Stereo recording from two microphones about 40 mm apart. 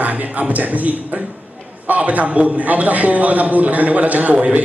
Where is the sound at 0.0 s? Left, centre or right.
Right.